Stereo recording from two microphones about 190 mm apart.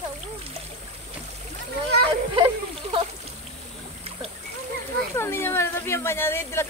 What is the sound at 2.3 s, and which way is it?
Speech, 30° right (ahead or behind).